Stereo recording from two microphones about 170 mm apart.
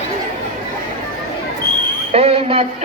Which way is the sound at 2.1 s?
35° right (ahead or behind).